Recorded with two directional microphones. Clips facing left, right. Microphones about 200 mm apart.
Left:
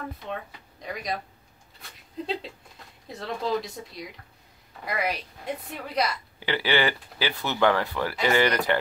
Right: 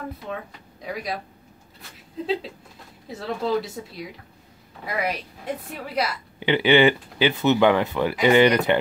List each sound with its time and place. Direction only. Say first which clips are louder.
0.8 s a woman's voice: right 2 dB; 5° right (ahead or behind)
1.8 s a sound: right 3 dB; centre (ahead or behind)
3.1 s a woman's voice: right 3 dB; 5° right (ahead or behind)
6.4 s speech: right 8 dB; 20° right (ahead or behind)